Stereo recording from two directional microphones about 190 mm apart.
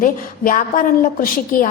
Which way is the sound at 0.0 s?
45° left (ahead or behind).